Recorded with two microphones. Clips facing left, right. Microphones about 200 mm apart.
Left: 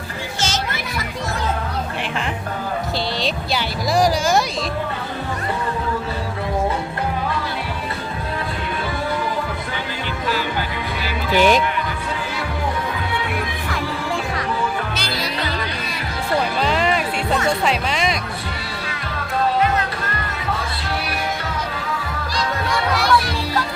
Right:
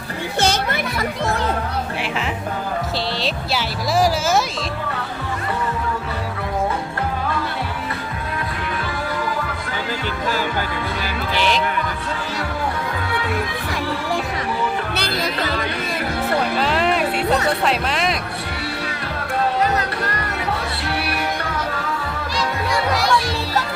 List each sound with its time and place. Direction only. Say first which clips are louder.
0.3 s music: right 6 dB; 60° right (ahead or behind)
3.2 s speech: left 1 dB; centre (ahead or behind)
11.3 s music: left 6 dB; 50° left (ahead or behind)
14.9 s music: right 2 dB; 55° right (ahead or behind)
16.6 s music: right 1 dB; centre (ahead or behind)
17.6 s speech: even; centre (ahead or behind)
19.6 s music: even; 35° right (ahead or behind)